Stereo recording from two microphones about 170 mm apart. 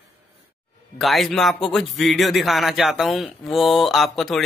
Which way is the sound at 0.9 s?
Centre (ahead or behind).